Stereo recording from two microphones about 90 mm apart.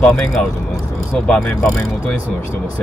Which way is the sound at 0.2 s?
5° left (ahead or behind).